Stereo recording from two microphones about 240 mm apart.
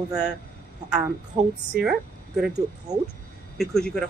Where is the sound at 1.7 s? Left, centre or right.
Centre.